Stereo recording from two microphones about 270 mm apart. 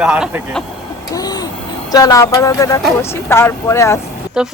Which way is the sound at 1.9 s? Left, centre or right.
Centre.